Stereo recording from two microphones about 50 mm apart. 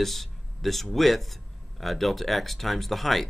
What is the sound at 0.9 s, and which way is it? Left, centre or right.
Speech, centre.